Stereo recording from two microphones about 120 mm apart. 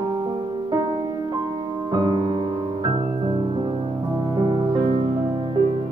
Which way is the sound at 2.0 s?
45° right (ahead or behind).